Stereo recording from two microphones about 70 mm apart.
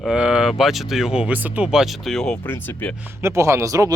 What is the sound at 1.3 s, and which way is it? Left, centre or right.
Speech, right.